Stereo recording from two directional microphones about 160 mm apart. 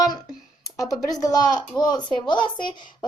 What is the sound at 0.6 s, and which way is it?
Speech, 20° left (ahead or behind).